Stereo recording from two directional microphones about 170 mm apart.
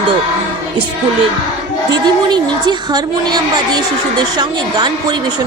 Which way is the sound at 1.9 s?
25° right (ahead or behind).